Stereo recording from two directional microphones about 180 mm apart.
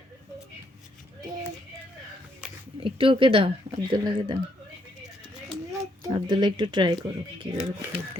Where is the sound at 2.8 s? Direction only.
30° right (ahead or behind).